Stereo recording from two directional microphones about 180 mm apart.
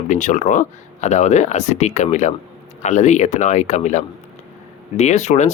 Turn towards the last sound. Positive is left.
turn(degrees=40)  # may be behind; listen again after turning